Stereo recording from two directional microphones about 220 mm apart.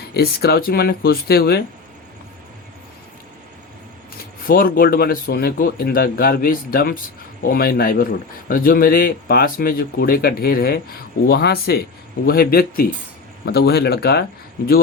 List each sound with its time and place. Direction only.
0.1 s speech: 45° left (ahead or behind)
4.4 s speech: 40° left (ahead or behind)